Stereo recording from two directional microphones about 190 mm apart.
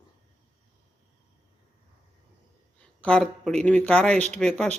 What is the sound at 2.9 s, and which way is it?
Speech, 5° left (ahead or behind).